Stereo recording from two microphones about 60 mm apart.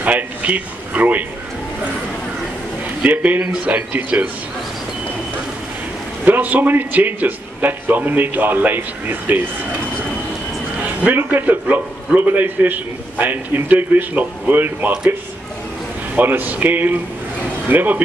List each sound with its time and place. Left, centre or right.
0.0 s a sound: right
3.1 s a man's voice: right
6.2 s a man's voice: right
10.8 s a man's voice: right
16.2 s a man's voice: right